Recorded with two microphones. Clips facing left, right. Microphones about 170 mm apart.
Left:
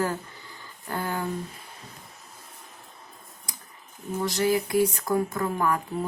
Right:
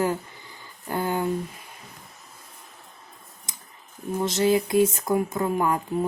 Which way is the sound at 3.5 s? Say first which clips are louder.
Left 1 dB; 25° right (ahead or behind).